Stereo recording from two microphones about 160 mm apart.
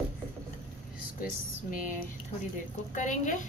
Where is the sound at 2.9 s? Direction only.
50° left (ahead or behind).